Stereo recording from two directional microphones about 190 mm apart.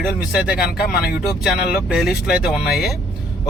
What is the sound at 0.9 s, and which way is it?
Speech, 55° left (ahead or behind).